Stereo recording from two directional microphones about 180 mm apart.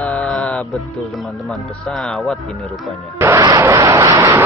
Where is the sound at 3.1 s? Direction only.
15° right (ahead or behind).